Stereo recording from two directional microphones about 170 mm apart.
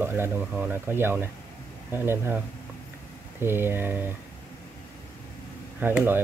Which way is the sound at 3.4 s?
15° right (ahead or behind).